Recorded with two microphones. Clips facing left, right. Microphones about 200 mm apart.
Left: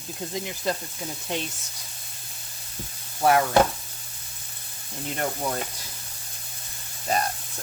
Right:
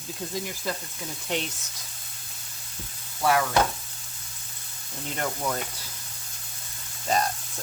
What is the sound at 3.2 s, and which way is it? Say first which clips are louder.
Stir: left 3 dB; 30° left (ahead or behind).